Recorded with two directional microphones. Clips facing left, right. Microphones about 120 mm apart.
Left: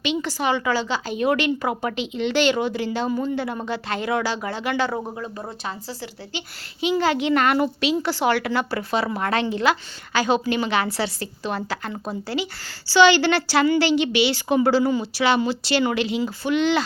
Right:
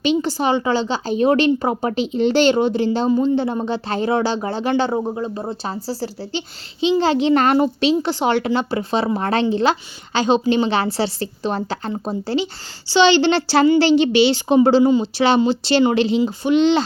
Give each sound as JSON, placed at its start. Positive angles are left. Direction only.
{"t": 0.0, "sound": "a woman's voice", "side_deg": -35}